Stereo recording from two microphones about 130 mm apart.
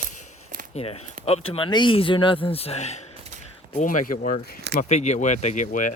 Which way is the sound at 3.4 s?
70° left (ahead or behind).